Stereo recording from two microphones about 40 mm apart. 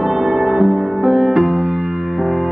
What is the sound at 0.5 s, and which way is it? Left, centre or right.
Music, centre.